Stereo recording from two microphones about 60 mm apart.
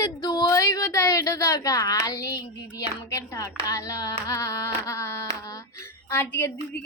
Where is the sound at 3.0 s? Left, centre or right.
Left.